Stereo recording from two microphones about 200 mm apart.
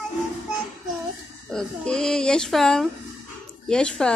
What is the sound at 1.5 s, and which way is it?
A woman's voice, 5° left (ahead or behind).